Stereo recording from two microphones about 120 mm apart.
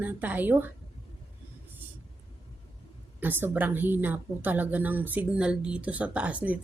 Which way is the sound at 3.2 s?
15° right (ahead or behind).